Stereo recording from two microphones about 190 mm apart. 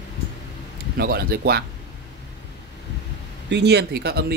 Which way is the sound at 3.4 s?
65° right (ahead or behind).